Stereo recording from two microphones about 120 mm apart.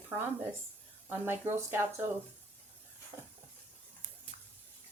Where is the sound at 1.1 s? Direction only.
20° right (ahead or behind).